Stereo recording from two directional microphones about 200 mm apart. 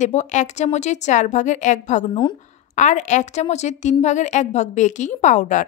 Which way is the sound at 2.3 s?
35° left (ahead or behind).